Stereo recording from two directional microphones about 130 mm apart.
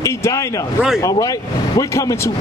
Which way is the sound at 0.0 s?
25° left (ahead or behind).